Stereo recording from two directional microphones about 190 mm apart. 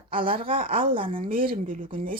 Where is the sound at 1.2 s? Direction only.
45° right (ahead or behind).